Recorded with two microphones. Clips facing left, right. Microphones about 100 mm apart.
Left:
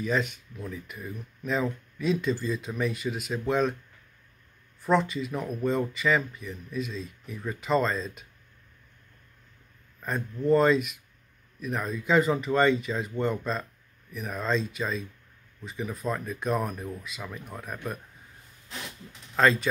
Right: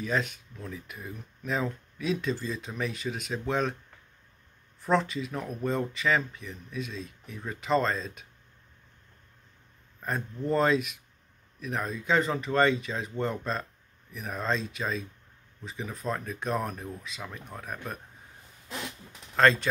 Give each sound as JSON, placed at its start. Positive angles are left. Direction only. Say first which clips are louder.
{"t": 0.0, "sound": "speech", "louder": "left 2 dB", "side_deg": 0}
{"t": 4.8, "sound": "speech", "louder": "left 2 dB", "side_deg": 0}
{"t": 10.0, "sound": "speech", "louder": "left 5 dB", "side_deg": 0}
{"t": 19.3, "sound": "speech", "louder": "even", "side_deg": 0}